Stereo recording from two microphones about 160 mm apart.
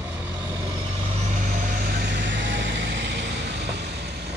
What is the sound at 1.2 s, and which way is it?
Vehicle, 50° right (ahead or behind).